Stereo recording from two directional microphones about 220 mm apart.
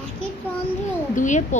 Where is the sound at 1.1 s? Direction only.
35° left (ahead or behind).